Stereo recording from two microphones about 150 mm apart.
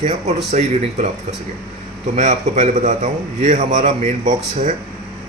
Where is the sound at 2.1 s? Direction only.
55° right (ahead or behind).